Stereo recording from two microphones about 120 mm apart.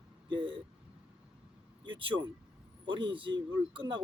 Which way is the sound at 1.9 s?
45° right (ahead or behind).